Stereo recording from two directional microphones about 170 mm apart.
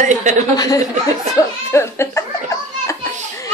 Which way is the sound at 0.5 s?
20° left (ahead or behind).